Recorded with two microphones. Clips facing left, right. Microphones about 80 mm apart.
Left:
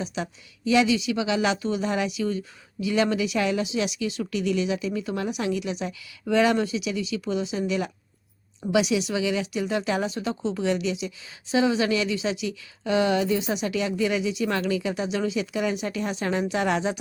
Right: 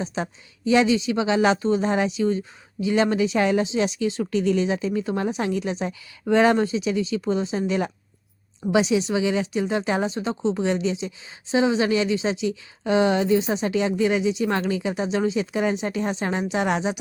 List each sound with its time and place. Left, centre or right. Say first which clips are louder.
0.0 s speech: right 3 dB; right